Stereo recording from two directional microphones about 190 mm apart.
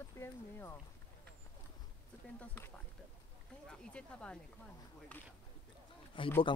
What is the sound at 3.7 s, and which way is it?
Speech, 5° left (ahead or behind).